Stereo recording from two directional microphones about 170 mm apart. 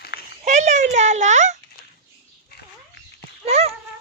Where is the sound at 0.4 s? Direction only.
45° right (ahead or behind).